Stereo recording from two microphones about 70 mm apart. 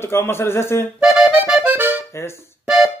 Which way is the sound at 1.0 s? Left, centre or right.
Centre.